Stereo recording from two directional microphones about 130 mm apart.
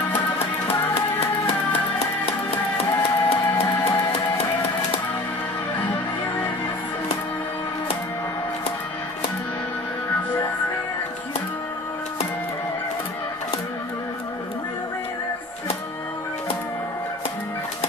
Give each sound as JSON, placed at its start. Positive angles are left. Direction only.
{"t": 3.0, "sound": "music", "side_deg": 45}